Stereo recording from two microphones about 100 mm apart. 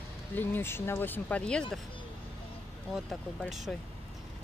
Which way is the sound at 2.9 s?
Centre (ahead or behind).